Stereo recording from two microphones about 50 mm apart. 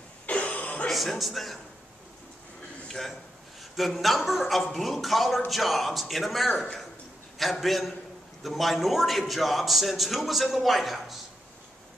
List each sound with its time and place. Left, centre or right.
0.3 s throat clearing: left
0.8 s a man's voice: centre
2.9 s a man's voice: centre